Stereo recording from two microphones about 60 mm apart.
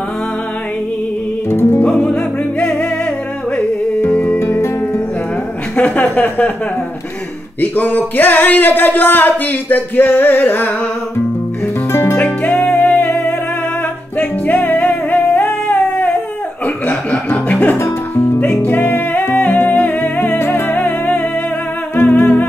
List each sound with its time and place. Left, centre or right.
1.5 s music: left
1.9 s music: centre
4.1 s music: left
4.4 s music: left
5.8 s a sound: left
7.6 s a sound: left
11.9 s music: left
12.2 s music: left
17.3 s music: left